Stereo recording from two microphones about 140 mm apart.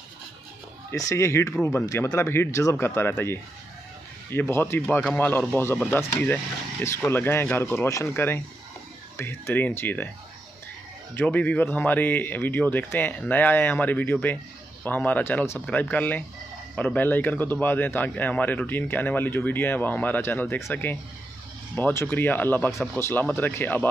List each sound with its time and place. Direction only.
0.9 s speech: 20° left (ahead or behind)
11.1 s speech: 10° left (ahead or behind)